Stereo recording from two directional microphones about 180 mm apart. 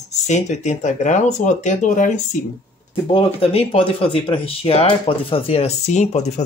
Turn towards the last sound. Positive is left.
turn(degrees=40)  # may be behind; listen again after turning